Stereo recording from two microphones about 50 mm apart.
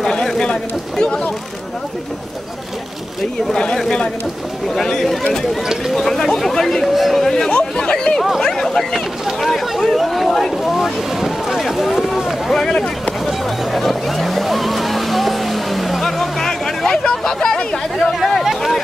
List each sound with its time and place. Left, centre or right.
0.0 s speech: centre
3.4 s speech: centre
12.5 s speech: centre
13.2 s vehicle: centre
16.4 s a sound: centre
18.2 s a sound: centre